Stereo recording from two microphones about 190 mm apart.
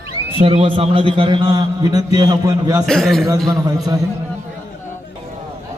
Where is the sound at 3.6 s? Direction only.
20° right (ahead or behind).